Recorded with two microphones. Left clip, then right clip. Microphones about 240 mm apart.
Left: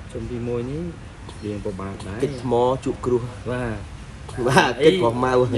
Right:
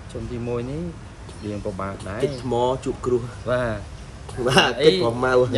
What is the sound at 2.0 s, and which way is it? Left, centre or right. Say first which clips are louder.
Speech: left 1 dB; centre.